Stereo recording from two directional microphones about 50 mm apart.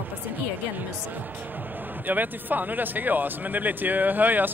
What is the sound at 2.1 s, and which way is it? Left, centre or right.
Speech, right.